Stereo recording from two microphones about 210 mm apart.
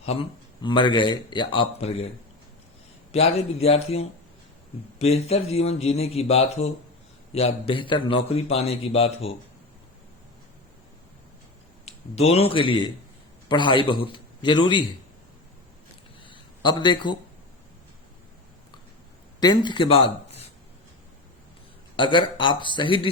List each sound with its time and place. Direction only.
0.0 s a man's voice: 25° left (ahead or behind)
3.1 s a man's voice: 30° left (ahead or behind)
11.9 s a man's voice: 30° left (ahead or behind)
16.2 s a sound: 25° left (ahead or behind)
19.4 s speech: 20° left (ahead or behind)
21.9 s a man's voice: 25° left (ahead or behind)